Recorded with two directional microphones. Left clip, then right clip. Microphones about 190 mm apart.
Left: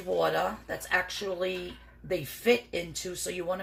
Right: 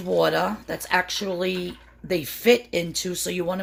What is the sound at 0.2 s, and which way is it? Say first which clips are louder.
Speech: right 7 dB; 60° right (ahead or behind).